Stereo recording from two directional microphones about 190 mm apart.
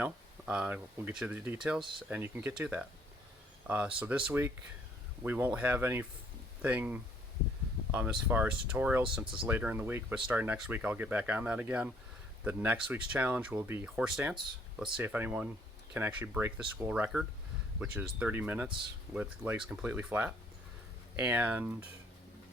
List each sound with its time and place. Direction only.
0.0 s speech: 5° right (ahead or behind)
9.2 s speech: 25° right (ahead or behind)
9.5 s speech: 10° right (ahead or behind)